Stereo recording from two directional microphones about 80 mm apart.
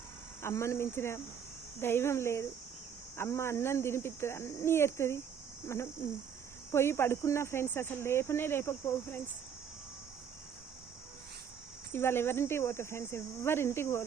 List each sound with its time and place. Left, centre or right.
0.4 s speech: left
11.9 s speech: left